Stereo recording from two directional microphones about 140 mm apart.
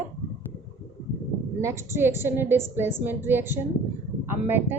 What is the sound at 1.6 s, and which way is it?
A woman's voice, 20° right (ahead or behind).